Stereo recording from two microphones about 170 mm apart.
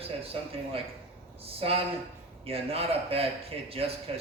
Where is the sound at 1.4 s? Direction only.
35° right (ahead or behind).